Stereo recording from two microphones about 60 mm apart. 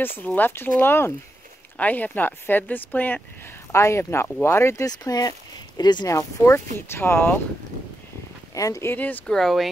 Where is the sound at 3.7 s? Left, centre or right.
Left.